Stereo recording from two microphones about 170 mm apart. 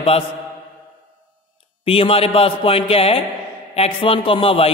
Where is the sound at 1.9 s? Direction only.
35° left (ahead or behind).